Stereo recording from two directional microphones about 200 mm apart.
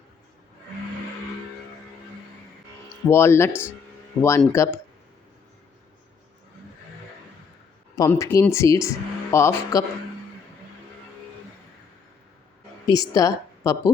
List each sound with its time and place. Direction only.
3.1 s speech: 15° left (ahead or behind)
7.9 s speech: 15° left (ahead or behind)
12.9 s speech: 15° left (ahead or behind)